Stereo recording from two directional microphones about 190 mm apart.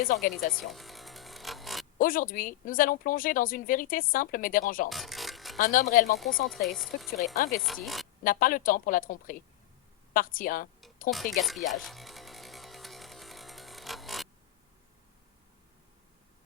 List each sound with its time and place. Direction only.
0.1 s speech: 45° left (ahead or behind)
0.5 s music: centre (ahead or behind)
2.0 s speech: 45° left (ahead or behind)
4.9 s music: centre (ahead or behind)
5.5 s speech: 45° left (ahead or behind)
6.4 s a woman's voice: centre (ahead or behind)
7.3 s speech: 45° left (ahead or behind)
7.6 s a woman's voice: centre (ahead or behind)
8.2 s speech: 45° left (ahead or behind)
11.1 s music: centre (ahead or behind)